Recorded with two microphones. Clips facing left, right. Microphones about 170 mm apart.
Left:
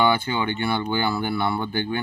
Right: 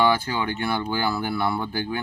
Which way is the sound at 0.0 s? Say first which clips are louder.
Even; centre (ahead or behind).